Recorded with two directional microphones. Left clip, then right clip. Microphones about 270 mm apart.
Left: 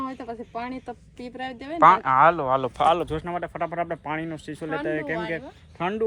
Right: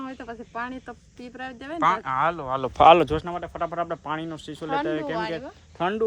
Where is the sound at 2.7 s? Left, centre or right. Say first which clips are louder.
Right 11 dB; right.